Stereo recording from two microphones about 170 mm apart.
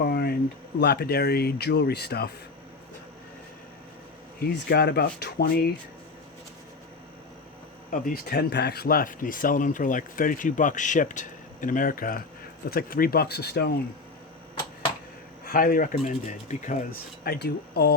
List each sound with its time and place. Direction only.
0.0 s a sound: 65° left (ahead or behind)
0.8 s speech: 70° left (ahead or behind)
4.4 s speech: 65° left (ahead or behind)
7.9 s speech: 60° left (ahead or behind)
15.4 s speech: 55° left (ahead or behind)
17.2 s speech: 70° left (ahead or behind)